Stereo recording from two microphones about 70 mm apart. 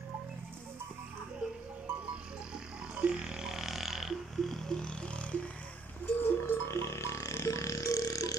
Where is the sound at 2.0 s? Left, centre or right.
Centre.